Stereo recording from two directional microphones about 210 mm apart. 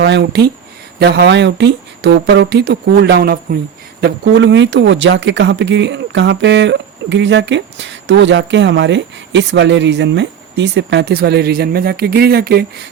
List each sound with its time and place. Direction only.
0.0 s speech: 55° right (ahead or behind)